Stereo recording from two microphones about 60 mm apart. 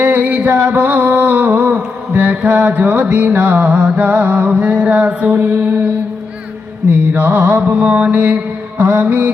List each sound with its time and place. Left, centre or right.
0.0 s music: right
7.1 s mantra: right